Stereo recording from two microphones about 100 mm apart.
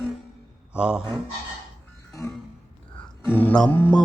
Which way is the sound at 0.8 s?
10° right (ahead or behind).